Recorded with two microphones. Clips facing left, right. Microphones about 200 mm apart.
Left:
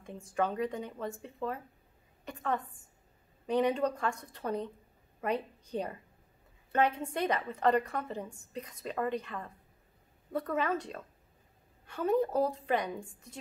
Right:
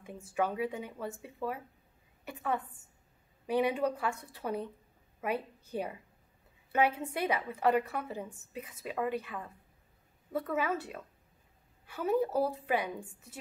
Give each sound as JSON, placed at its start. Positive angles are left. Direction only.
{"t": 0.0, "sound": "a woman's voice", "side_deg": -10}